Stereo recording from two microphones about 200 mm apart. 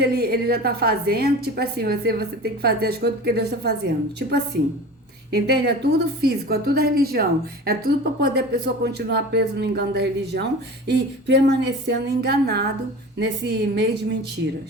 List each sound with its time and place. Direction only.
0.0 s a woman's voice: 50° right (ahead or behind)